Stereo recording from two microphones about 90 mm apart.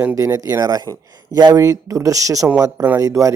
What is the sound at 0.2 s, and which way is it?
Speech, 40° right (ahead or behind).